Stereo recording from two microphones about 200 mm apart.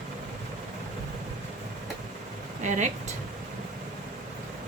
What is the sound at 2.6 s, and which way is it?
Speech, 40° right (ahead or behind).